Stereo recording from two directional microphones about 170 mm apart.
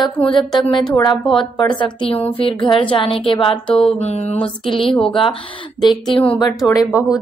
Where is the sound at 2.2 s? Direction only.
30° left (ahead or behind).